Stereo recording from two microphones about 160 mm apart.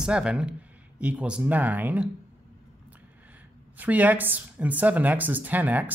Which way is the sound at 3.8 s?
10° right (ahead or behind).